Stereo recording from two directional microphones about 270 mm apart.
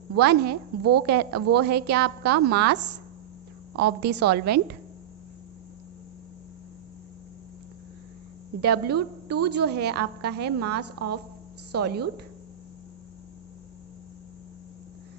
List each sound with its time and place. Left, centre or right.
0.2 s a woman's voice: right
0.8 s a woman's voice: right
1.0 s a woman's voice: right
3.8 s a woman's voice: right
8.6 s a woman's voice: right
10.8 s a woman's voice: right
11.7 s a woman's voice: right